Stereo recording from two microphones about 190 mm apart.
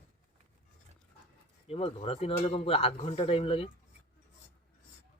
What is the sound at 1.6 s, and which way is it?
Speech, 30° left (ahead or behind).